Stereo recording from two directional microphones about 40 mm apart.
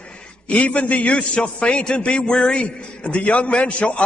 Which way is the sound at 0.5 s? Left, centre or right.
Left.